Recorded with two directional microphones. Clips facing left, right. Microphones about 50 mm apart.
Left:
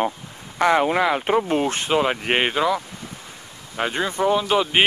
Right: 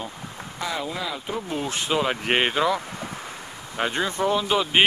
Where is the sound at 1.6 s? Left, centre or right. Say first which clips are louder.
Left 5 dB; left.